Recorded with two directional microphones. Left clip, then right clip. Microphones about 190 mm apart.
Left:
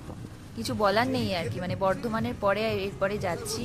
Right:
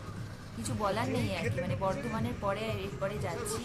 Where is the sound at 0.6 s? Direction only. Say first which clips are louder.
Left 8 dB; 35° left (ahead or behind).